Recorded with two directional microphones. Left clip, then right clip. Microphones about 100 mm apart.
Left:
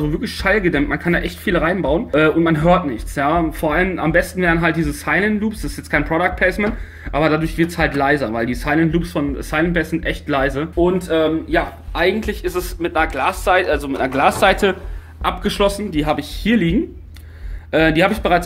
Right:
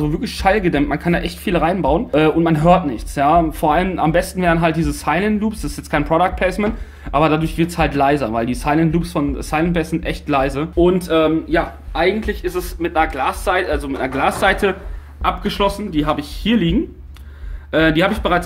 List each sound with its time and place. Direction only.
0.0 s speech: 20° right (ahead or behind)
11.9 s speech: 5° left (ahead or behind)